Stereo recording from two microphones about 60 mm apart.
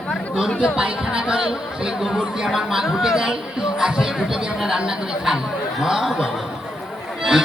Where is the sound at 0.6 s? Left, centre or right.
Centre.